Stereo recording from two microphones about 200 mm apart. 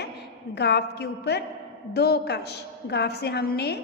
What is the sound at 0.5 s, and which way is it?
A woman's voice, 55° left (ahead or behind).